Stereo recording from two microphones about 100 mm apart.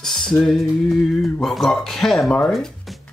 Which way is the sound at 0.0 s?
5° left (ahead or behind).